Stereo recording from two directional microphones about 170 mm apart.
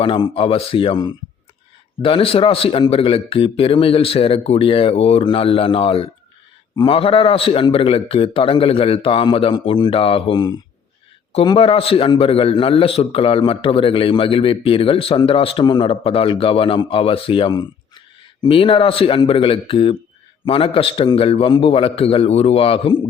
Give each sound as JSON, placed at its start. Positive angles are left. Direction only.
{"t": 0.0, "sound": "a man's voice", "side_deg": 30}